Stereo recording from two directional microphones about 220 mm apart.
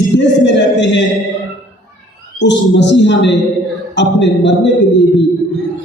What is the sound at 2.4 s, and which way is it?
A man's voice, 55° left (ahead or behind).